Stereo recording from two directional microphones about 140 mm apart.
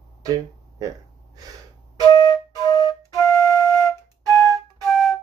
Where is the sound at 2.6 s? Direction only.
25° left (ahead or behind).